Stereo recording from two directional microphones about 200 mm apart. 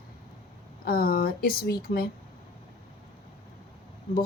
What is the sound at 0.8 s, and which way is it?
A woman's voice, 50° left (ahead or behind).